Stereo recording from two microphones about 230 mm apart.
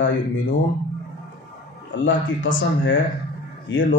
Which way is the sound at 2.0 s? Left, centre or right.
Left.